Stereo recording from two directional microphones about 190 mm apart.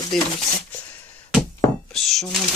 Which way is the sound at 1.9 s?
Centre (ahead or behind).